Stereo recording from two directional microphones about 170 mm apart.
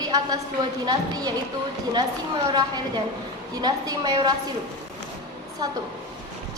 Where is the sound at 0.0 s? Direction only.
20° right (ahead or behind).